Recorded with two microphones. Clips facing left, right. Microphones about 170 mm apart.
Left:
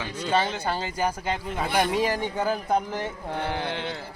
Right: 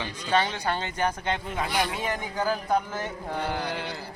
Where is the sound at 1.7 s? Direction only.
45° left (ahead or behind); by 2.7 s 25° left (ahead or behind).